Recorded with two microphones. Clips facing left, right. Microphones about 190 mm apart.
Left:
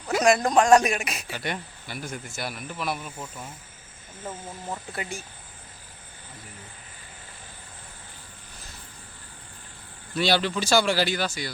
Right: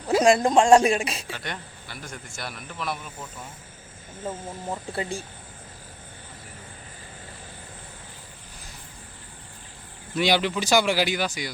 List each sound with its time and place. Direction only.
0.1 s speech: 30° right (ahead or behind)
1.3 s speech: 5° left (ahead or behind)
4.9 s speech: 30° right (ahead or behind)
10.2 s speech: 15° right (ahead or behind)